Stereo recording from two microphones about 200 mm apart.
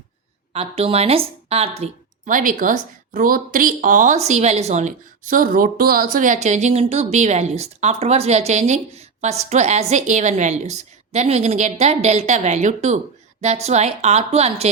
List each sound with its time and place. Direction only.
0.5 s speech: 30° right (ahead or behind)